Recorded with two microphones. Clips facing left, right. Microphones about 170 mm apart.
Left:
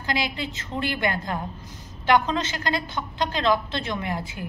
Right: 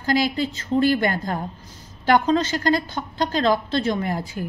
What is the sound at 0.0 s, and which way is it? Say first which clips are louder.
A woman's voice: right 7 dB; 40° right (ahead or behind).